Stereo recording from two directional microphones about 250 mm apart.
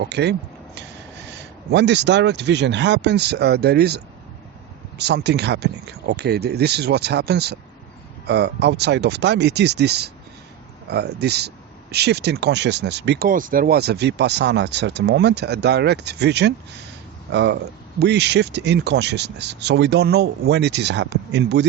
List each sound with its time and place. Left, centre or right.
0.0 s speech: right